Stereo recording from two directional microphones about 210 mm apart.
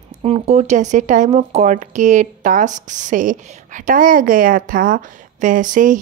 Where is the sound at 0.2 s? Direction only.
30° right (ahead or behind).